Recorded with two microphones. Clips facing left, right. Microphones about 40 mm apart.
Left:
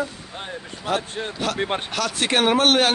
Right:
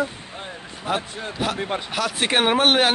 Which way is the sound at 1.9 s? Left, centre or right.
Centre.